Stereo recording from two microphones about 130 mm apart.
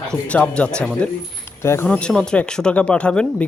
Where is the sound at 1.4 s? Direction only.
20° left (ahead or behind).